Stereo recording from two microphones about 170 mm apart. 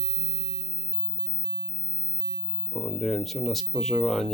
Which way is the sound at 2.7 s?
Centre (ahead or behind).